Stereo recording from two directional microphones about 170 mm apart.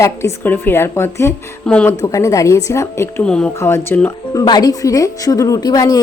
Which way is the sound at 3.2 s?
5° left (ahead or behind).